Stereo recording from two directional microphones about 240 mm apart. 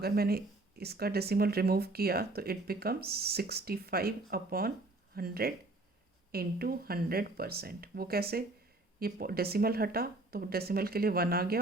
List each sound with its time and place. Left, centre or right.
0.0 s speech: right